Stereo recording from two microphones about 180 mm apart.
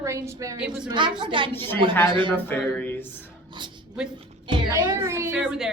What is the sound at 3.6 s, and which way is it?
A woman's voice, 25° right (ahead or behind).